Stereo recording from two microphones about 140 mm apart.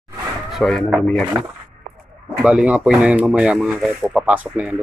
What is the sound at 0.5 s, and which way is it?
Speech, centre (ahead or behind).